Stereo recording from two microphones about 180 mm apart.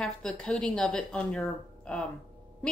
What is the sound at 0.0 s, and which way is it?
Speech, 5° left (ahead or behind).